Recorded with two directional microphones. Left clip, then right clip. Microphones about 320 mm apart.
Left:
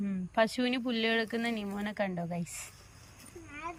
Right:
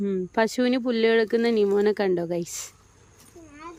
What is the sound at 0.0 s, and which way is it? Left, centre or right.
Speech, centre.